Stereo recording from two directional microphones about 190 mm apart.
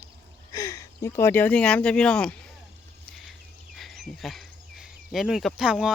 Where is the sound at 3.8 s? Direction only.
Centre (ahead or behind).